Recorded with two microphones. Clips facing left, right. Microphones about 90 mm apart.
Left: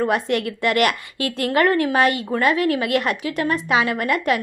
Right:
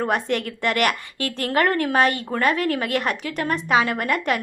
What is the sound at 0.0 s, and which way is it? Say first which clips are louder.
A woman's voice: left 3 dB; 45° right (ahead or behind).